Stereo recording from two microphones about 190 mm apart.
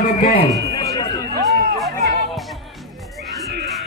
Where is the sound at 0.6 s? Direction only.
15° left (ahead or behind).